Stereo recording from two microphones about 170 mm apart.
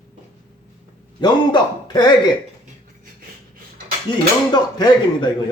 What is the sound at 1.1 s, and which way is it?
A man's voice, 25° left (ahead or behind).